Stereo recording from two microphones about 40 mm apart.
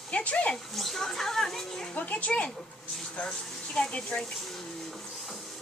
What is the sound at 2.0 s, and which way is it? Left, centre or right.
Speech, left.